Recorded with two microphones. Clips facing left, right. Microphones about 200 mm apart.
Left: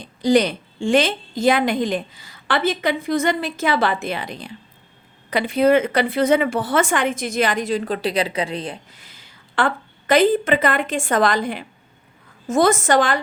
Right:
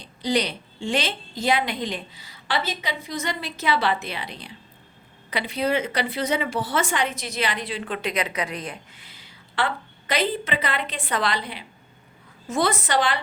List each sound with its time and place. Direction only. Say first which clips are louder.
0.0 s a woman's voice: left 8 dB; 50° left (ahead or behind)